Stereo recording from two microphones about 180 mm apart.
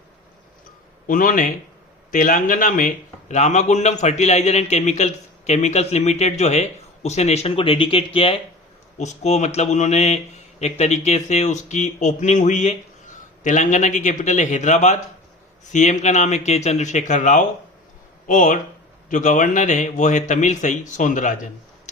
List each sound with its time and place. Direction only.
1.0 s speech: 50° left (ahead or behind)